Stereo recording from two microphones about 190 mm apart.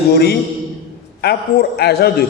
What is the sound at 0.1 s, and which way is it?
Mantra, 55° left (ahead or behind).